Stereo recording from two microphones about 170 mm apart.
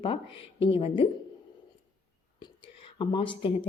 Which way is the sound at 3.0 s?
30° left (ahead or behind).